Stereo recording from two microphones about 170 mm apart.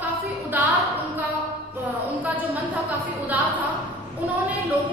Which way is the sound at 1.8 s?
10° right (ahead or behind).